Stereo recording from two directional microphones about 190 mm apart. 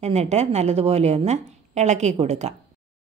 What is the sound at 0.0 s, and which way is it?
Speech, 35° right (ahead or behind).